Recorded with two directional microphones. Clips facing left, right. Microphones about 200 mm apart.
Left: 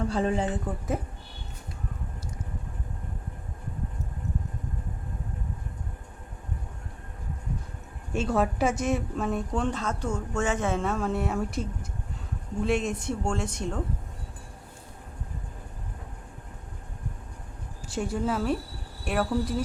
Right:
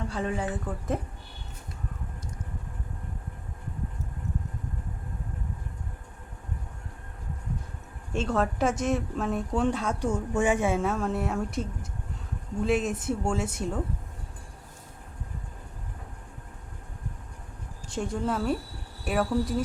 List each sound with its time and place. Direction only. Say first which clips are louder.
0.1 s speech: left 4 dB; 30° left (ahead or behind)
8.1 s a woman's voice: left 1 dB; 5° left (ahead or behind)
17.8 s a woman's voice: left 1 dB; 5° left (ahead or behind)